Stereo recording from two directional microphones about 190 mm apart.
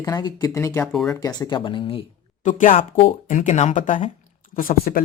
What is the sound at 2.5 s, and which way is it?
Speech, 40° left (ahead or behind).